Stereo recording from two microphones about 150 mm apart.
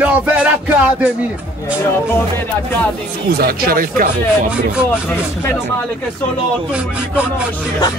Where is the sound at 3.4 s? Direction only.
75° right (ahead or behind).